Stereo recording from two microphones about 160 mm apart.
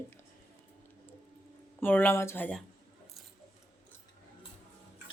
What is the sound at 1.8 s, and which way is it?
Speech, 10° left (ahead or behind).